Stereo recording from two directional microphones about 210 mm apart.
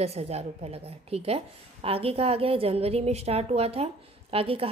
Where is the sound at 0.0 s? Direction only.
30° right (ahead or behind).